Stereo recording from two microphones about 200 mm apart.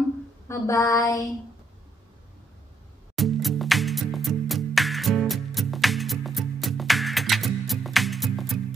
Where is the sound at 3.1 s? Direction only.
Centre (ahead or behind).